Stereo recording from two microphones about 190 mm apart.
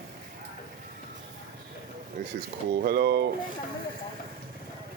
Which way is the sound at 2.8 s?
55° right (ahead or behind).